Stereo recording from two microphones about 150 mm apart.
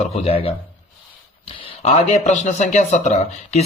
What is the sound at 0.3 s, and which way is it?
Speech, 40° left (ahead or behind).